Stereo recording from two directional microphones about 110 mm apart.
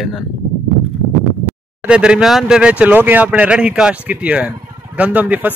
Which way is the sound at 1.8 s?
10° right (ahead or behind).